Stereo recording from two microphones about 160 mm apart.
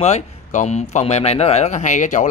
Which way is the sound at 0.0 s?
45° left (ahead or behind).